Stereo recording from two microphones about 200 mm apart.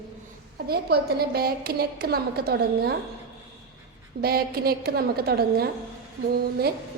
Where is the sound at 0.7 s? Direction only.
50° right (ahead or behind).